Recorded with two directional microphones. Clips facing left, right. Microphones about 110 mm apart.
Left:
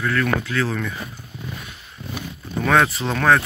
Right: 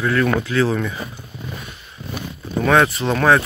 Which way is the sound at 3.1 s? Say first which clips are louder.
Right 2 dB; 15° right (ahead or behind).